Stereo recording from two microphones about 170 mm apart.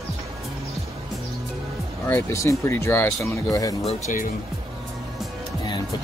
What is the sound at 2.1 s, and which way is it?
Speech, 15° left (ahead or behind).